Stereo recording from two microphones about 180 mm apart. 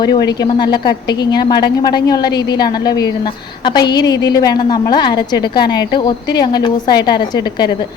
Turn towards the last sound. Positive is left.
turn(degrees=25)  # may be behind; listen again after turning